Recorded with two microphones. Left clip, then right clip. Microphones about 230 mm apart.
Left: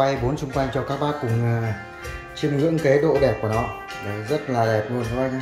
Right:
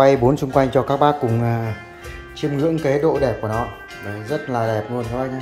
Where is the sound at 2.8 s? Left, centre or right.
Centre.